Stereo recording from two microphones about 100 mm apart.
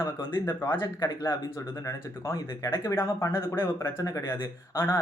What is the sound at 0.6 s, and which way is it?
Speech, 20° left (ahead or behind).